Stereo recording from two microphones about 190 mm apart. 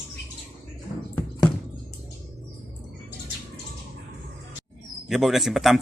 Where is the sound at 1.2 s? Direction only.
20° left (ahead or behind).